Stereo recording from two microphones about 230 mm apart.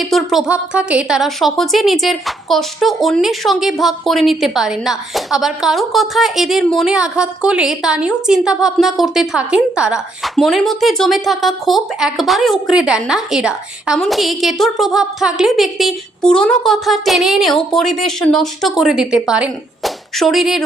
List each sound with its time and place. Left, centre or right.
0.0 s a woman's voice: centre